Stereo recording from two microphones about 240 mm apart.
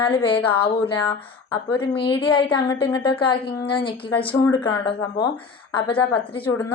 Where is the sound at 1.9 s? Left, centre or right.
Left.